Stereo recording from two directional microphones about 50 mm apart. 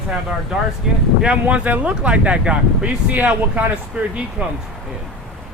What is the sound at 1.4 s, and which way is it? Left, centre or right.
Speech, right.